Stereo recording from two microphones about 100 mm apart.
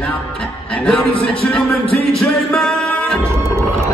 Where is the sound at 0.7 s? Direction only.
10° left (ahead or behind).